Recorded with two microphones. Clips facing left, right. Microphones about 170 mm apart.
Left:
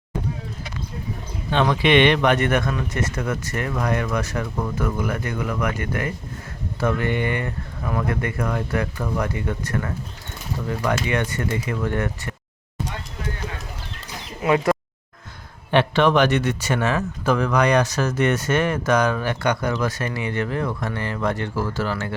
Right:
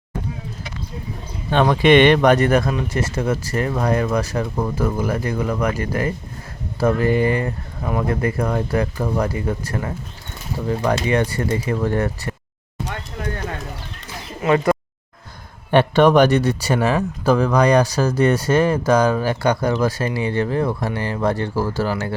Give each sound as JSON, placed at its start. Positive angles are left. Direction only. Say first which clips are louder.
{"t": 1.6, "sound": "speech", "louder": "right 4 dB", "side_deg": -45}
{"t": 14.4, "sound": "speech", "louder": "right 2 dB", "side_deg": 5}
{"t": 15.7, "sound": "speech", "louder": "right 4 dB", "side_deg": -40}